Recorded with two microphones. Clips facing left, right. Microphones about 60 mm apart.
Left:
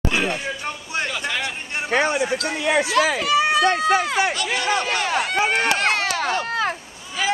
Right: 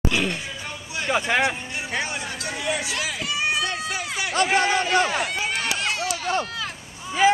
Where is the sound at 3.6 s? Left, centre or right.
Left.